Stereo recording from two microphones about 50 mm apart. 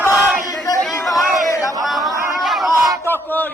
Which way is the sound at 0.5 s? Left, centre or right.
Centre.